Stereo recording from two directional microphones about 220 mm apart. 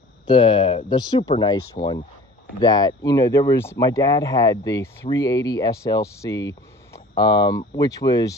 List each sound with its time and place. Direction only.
0.3 s speech: 20° left (ahead or behind)